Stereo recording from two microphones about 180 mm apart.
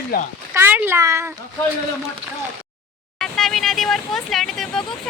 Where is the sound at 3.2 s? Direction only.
Centre (ahead or behind).